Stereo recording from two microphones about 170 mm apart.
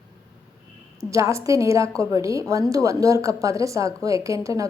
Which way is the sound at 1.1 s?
15° right (ahead or behind).